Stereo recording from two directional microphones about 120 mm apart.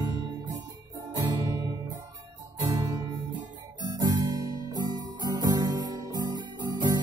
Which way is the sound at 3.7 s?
35° right (ahead or behind).